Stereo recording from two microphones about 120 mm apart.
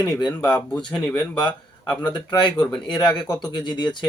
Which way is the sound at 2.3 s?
40° left (ahead or behind).